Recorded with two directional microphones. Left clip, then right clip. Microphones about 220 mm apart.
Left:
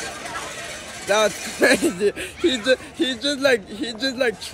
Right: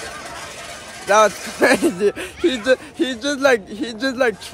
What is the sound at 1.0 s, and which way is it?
Speech, 15° right (ahead or behind).